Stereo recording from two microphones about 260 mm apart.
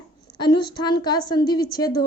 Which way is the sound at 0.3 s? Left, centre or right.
Centre.